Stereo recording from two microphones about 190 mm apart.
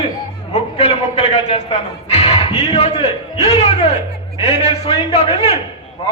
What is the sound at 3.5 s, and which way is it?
A man's voice, 35° left (ahead or behind).